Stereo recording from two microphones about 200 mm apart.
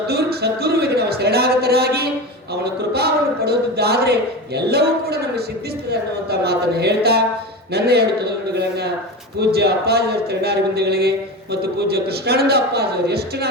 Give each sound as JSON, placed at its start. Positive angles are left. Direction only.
{"t": 0.1, "sound": "a man's voice", "side_deg": -55}